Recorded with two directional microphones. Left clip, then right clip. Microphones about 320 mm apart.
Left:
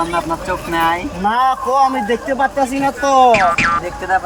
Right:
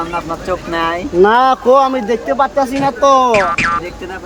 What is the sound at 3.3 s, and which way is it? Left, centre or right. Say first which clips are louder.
Speech: even; centre.